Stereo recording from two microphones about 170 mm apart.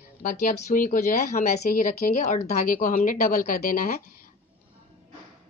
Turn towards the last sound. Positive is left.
turn(degrees=55)  # may be behind; listen again after turning